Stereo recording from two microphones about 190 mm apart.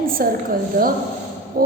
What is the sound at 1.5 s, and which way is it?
Speech, 50° right (ahead or behind).